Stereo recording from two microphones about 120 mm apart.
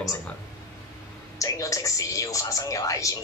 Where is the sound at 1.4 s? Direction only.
30° left (ahead or behind).